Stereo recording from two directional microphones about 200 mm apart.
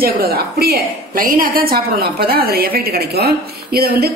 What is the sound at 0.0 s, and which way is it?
Speech, 50° right (ahead or behind).